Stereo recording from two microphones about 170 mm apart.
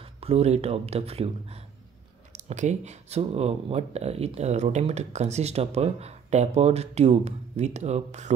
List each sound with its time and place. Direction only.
0.0 s speech: 35° right (ahead or behind)